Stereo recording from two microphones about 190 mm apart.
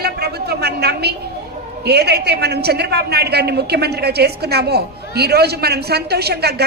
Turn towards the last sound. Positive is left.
turn(degrees=-55)  # may be behind; listen again after turning